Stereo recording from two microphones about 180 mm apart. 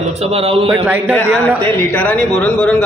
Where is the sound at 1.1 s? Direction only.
10° left (ahead or behind).